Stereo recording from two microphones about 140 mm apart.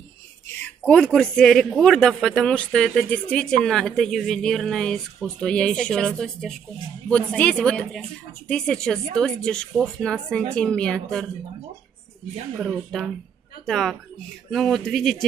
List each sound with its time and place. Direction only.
0.6 s a man's voice: 10° left (ahead or behind)
12.5 s a man's voice: 5° right (ahead or behind)